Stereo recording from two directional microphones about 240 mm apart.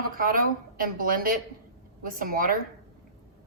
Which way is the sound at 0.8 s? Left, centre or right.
Right.